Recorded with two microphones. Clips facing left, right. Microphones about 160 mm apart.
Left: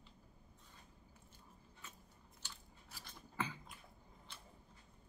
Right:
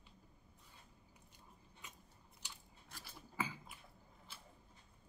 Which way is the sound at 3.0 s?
5° right (ahead or behind).